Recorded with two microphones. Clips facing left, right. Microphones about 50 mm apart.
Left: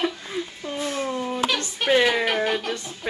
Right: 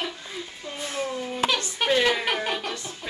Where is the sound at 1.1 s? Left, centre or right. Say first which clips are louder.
Left 4 dB; left.